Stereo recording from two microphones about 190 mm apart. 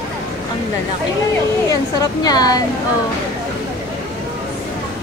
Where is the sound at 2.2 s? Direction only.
20° left (ahead or behind).